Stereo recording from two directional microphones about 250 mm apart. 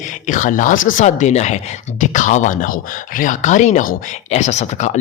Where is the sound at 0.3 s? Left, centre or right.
Left.